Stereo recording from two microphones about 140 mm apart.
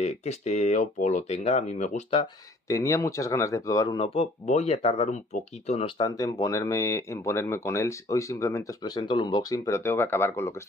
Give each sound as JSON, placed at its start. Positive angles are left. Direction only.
{"t": 0.0, "sound": "speech", "side_deg": 50}
{"t": 2.7, "sound": "speech", "side_deg": 20}
{"t": 4.0, "sound": "speech", "side_deg": 45}
{"t": 5.9, "sound": "speech", "side_deg": 25}